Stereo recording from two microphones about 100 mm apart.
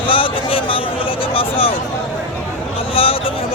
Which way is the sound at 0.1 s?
60° left (ahead or behind).